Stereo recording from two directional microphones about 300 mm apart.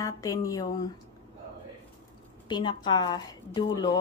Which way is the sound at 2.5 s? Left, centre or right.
Centre.